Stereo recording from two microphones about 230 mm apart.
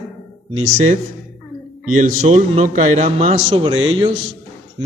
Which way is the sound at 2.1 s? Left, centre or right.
Right.